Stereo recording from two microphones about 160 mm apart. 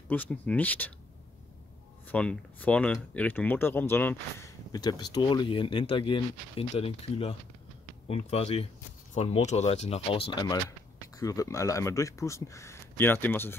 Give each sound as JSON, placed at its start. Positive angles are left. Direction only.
{"t": 0.1, "sound": "speech", "side_deg": 10}
{"t": 2.0, "sound": "speech", "side_deg": 10}
{"t": 11.1, "sound": "speech", "side_deg": 20}